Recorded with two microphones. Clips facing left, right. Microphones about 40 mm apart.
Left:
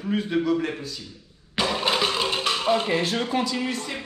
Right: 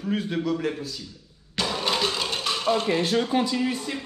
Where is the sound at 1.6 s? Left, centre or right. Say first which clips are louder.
Left 2 dB; centre.